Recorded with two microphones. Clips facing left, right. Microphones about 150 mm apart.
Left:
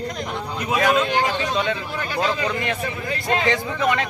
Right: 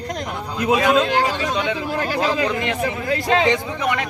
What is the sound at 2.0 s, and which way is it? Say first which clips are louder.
Speech: right 2 dB; 90° right.